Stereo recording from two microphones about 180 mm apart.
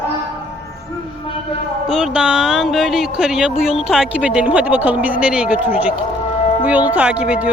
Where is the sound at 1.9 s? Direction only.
5° right (ahead or behind).